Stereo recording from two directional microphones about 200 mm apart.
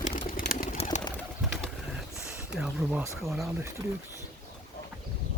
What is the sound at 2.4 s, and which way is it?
Speech, 5° right (ahead or behind).